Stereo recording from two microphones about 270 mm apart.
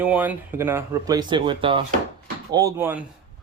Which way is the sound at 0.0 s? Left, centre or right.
Centre.